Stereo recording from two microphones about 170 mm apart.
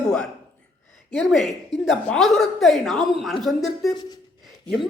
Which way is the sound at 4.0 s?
25° left (ahead or behind).